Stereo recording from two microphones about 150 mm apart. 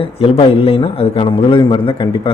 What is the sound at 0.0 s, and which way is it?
A man's voice, 40° left (ahead or behind).